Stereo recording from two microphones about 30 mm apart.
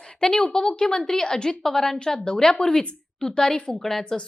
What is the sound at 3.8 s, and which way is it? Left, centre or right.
Speech, centre.